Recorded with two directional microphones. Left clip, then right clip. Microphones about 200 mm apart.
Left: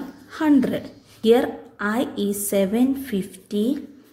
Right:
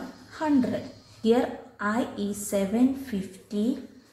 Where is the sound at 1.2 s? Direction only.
50° left (ahead or behind).